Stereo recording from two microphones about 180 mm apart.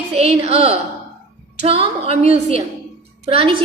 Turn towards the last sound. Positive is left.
turn(degrees=-30)  # may be behind; listen again after turning